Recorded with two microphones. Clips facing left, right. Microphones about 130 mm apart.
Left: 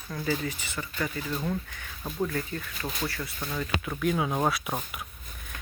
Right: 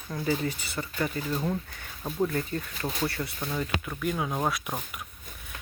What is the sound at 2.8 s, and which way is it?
Speech, 10° right (ahead or behind).